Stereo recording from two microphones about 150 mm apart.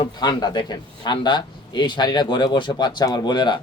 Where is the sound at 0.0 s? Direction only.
30° left (ahead or behind).